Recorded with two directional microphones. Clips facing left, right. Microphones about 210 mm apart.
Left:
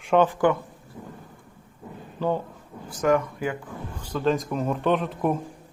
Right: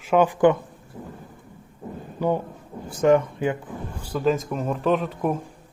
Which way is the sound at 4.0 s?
10° right (ahead or behind).